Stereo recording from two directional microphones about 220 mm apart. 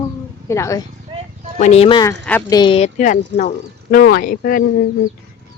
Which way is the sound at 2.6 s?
25° left (ahead or behind).